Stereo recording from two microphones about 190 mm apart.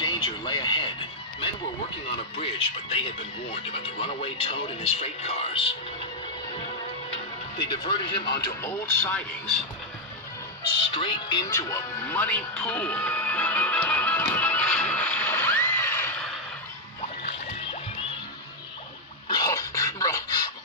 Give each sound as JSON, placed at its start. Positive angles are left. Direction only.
{"t": 0.0, "sound": "speech", "side_deg": 25}
{"t": 2.3, "sound": "speech", "side_deg": 30}
{"t": 7.5, "sound": "speech", "side_deg": 25}
{"t": 8.5, "sound": "speech", "side_deg": 15}
{"t": 10.9, "sound": "music", "side_deg": 25}
{"t": 19.2, "sound": "a sound", "side_deg": 20}